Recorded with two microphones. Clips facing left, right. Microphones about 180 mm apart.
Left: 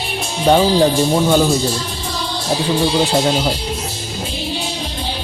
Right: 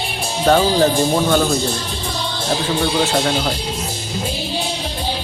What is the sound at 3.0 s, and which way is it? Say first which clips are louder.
Speech: left 2 dB; 20° left (ahead or behind).